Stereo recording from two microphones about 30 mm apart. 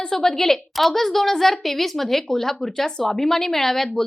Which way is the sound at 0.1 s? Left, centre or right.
Centre.